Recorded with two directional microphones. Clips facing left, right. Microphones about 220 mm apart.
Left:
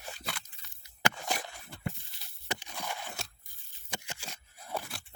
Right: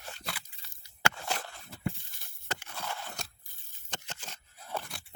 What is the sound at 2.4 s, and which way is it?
Biting, 15° left (ahead or behind).